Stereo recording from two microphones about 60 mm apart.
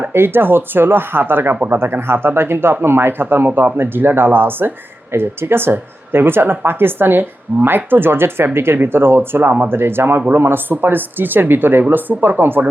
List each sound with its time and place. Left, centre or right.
0.0 s speech: right